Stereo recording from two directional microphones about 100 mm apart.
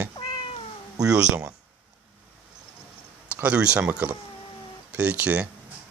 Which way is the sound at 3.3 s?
15° right (ahead or behind).